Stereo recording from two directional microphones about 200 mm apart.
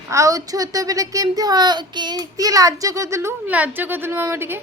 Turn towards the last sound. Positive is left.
turn(degrees=-10)  # may be behind; listen again after turning